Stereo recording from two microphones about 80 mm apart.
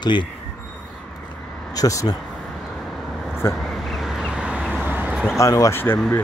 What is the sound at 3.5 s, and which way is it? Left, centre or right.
Vehicle, centre.